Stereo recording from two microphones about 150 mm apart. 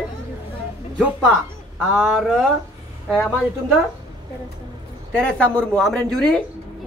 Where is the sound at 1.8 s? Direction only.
5° right (ahead or behind).